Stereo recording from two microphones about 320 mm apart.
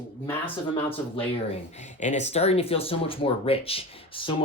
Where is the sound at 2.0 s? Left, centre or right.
Left.